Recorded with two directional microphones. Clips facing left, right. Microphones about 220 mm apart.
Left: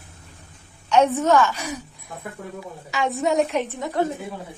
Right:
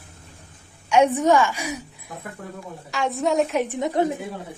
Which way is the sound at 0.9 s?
15° right (ahead or behind).